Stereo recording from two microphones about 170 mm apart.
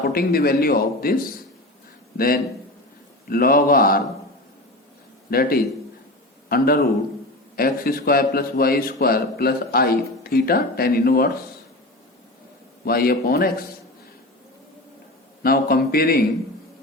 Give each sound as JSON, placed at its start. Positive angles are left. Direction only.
{"t": 0.0, "sound": "a man's voice", "side_deg": 65}
{"t": 5.3, "sound": "a man's voice", "side_deg": 60}
{"t": 12.8, "sound": "a man's voice", "side_deg": 65}
{"t": 15.4, "sound": "a man's voice", "side_deg": 65}